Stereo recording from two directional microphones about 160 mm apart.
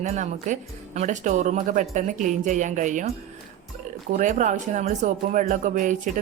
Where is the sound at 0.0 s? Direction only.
50° right (ahead or behind).